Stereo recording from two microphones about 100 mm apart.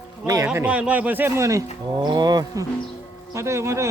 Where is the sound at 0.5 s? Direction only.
15° right (ahead or behind); by 1.6 s 30° right (ahead or behind).